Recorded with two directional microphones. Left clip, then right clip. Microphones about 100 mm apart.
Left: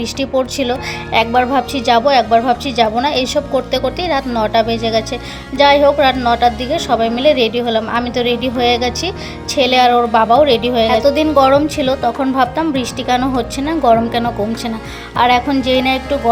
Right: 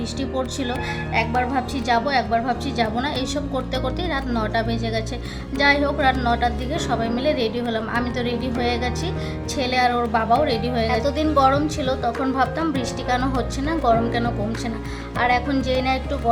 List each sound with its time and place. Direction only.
0.3 s a woman's voice: 45° left (ahead or behind)
1.4 s a woman's voice: 55° left (ahead or behind)